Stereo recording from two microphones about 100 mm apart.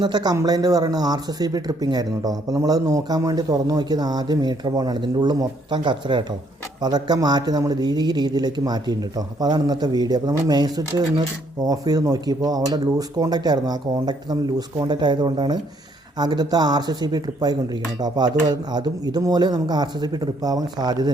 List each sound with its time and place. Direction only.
0.0 s speech: 45° right (ahead or behind)